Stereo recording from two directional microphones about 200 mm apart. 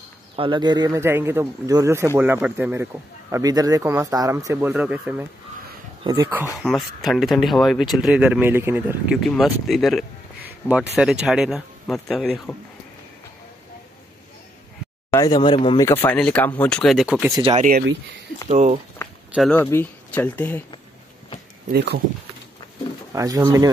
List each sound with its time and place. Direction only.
0.4 s speech: 25° right (ahead or behind); by 5.2 s 5° right (ahead or behind)
6.0 s speech: 15° right (ahead or behind)
6.6 s speech: centre (ahead or behind)
15.0 s speech: 15° left (ahead or behind)
15.9 s speech: 10° left (ahead or behind)
17.4 s speech: 25° right (ahead or behind)
19.0 s a sound: 10° left (ahead or behind)
19.3 s speech: 5° left (ahead or behind)
21.7 s speech: 55° right (ahead or behind)
23.1 s speech: 15° right (ahead or behind)